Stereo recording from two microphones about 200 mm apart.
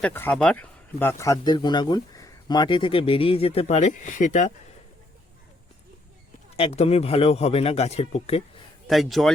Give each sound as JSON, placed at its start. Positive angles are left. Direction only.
{"t": 0.0, "sound": "speech", "side_deg": 10}
{"t": 6.6, "sound": "speech", "side_deg": 30}
{"t": 8.9, "sound": "a man's voice", "side_deg": 0}